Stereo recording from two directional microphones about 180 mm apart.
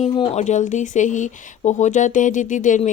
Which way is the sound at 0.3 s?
40° left (ahead or behind).